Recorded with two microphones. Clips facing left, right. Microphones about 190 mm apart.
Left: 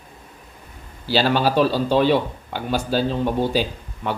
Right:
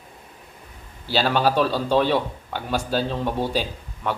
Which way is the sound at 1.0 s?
Centre (ahead or behind).